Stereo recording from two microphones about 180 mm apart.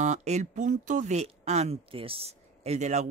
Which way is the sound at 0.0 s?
40° right (ahead or behind).